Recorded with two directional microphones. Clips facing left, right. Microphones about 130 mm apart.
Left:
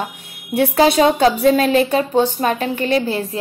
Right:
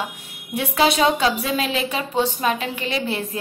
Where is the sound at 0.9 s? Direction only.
50° left (ahead or behind).